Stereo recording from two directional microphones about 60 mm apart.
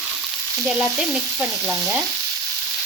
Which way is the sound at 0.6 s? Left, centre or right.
Centre.